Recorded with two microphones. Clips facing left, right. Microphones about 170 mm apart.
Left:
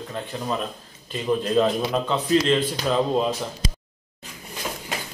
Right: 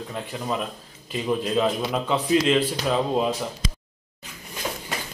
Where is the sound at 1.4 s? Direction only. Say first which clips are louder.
Left 4 dB; 5° right (ahead or behind).